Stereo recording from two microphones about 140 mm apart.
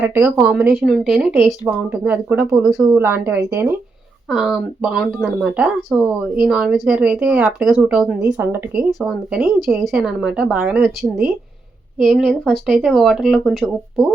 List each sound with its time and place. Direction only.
0.0 s speech: 15° right (ahead or behind)
0.8 s speech: centre (ahead or behind); by 3.7 s 15° right (ahead or behind)
4.3 s speech: 5° right (ahead or behind)
8.9 s speech: centre (ahead or behind)